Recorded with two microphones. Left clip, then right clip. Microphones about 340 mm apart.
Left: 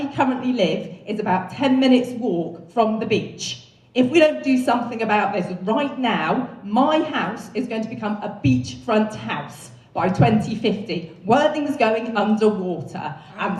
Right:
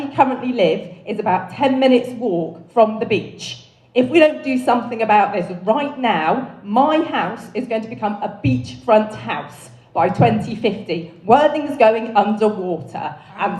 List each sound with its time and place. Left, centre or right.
0.2 s a woman's voice: centre